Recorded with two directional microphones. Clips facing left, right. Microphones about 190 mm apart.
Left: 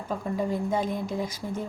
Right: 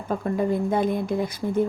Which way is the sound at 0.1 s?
60° right (ahead or behind).